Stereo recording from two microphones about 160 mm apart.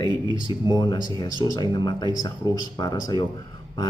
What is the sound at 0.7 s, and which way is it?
Speech, 25° left (ahead or behind).